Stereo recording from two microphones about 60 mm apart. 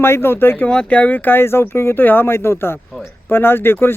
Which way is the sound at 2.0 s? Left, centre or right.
Left.